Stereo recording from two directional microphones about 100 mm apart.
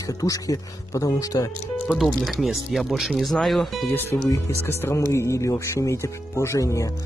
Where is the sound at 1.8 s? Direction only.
Centre (ahead or behind).